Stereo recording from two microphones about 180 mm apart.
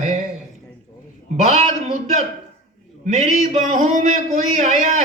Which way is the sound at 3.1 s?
40° right (ahead or behind).